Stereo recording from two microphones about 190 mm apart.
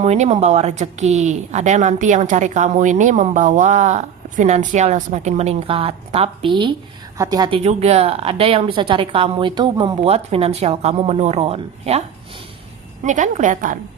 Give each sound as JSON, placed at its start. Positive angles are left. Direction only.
{"t": 0.0, "sound": "a woman's voice", "side_deg": -35}
{"t": 7.6, "sound": "speech", "side_deg": -35}